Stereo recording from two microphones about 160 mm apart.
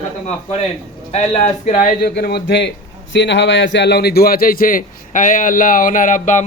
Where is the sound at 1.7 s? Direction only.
65° left (ahead or behind).